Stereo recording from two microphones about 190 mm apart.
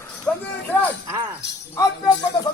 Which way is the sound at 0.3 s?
5° left (ahead or behind).